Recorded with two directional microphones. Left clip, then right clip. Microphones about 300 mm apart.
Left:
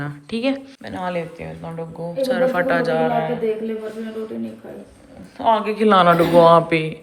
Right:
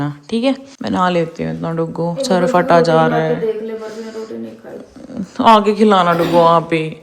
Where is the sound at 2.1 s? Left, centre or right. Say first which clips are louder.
Right 3 dB; right.